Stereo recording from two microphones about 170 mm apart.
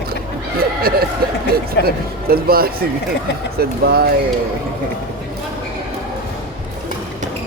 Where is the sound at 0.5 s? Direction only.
65° right (ahead or behind).